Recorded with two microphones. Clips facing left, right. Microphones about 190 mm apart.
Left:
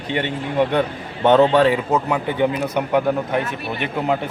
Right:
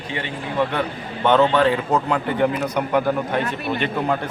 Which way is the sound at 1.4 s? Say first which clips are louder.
Left 3 dB; 35° left (ahead or behind).